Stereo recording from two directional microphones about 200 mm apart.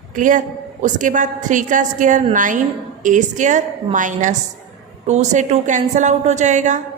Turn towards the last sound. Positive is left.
turn(degrees=-35)  # may be behind; listen again after turning